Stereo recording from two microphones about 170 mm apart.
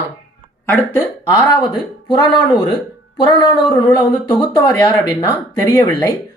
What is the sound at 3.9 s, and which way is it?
Speech, 25° left (ahead or behind).